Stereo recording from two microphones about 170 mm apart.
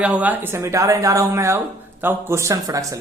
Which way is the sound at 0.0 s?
10° right (ahead or behind).